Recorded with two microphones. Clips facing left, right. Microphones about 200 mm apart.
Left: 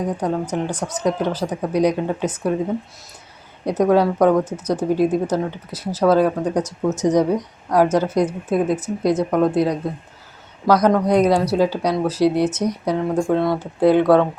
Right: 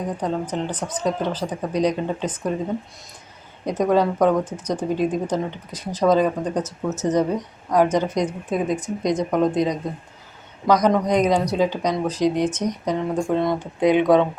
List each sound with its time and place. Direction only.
0.0 s a woman's voice: 10° left (ahead or behind)
3.7 s a woman's voice: 10° left (ahead or behind)
13.8 s speech: 15° right (ahead or behind)